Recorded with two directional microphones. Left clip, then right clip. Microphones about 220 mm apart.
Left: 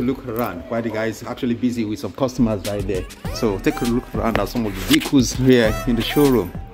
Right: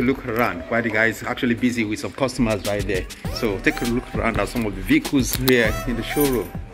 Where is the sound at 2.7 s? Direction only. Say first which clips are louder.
Right 1 dB; 15° left (ahead or behind).